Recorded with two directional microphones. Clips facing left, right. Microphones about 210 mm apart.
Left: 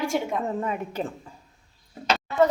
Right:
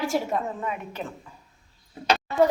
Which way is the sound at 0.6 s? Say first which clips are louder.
Left 3 dB; 30° left (ahead or behind).